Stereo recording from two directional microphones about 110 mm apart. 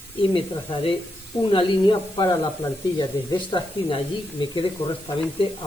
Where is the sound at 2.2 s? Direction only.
35° left (ahead or behind).